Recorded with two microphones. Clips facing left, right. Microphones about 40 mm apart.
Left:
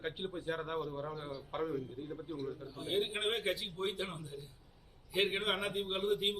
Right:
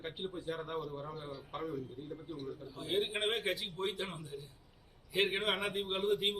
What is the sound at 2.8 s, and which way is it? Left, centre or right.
A man's voice, right.